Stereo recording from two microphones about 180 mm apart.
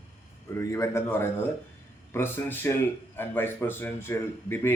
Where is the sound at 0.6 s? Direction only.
15° left (ahead or behind).